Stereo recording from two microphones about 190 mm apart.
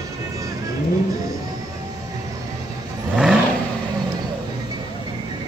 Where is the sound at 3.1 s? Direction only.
5° right (ahead or behind).